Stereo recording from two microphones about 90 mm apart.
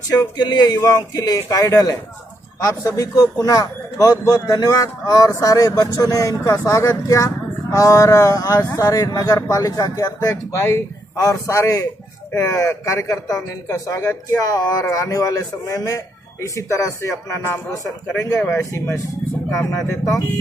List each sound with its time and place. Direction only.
0.4 s a man's voice: 50° left (ahead or behind)
10.3 s a man's voice: 30° left (ahead or behind)